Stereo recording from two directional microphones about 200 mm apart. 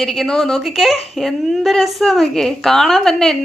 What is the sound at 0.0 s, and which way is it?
A woman's voice, centre (ahead or behind).